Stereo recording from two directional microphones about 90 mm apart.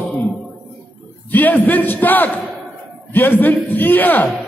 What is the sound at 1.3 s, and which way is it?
A man's voice, 20° left (ahead or behind).